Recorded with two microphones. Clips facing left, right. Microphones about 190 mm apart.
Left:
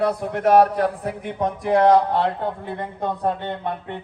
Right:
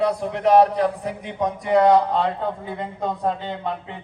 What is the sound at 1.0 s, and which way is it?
A man's voice, centre (ahead or behind).